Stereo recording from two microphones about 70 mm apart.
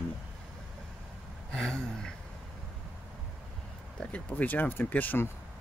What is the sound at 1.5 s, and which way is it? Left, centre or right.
Speech, centre.